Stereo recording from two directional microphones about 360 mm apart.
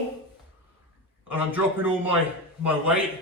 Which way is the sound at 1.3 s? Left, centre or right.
Centre.